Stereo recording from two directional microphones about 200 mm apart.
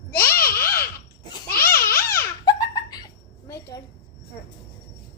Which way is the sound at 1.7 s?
10° left (ahead or behind).